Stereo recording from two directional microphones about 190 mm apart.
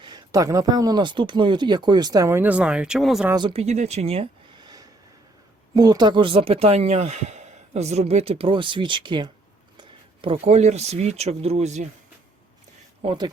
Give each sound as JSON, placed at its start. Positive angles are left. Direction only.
{"t": 0.0, "sound": "speech", "side_deg": -20}
{"t": 3.3, "sound": "speech", "side_deg": -30}
{"t": 13.0, "sound": "speech", "side_deg": -25}